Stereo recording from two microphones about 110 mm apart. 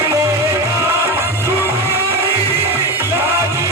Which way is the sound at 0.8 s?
25° right (ahead or behind).